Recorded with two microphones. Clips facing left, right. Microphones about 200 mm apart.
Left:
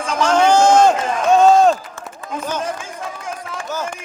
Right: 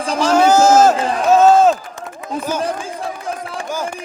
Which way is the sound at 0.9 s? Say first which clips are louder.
Right 2 dB; 35° right (ahead or behind).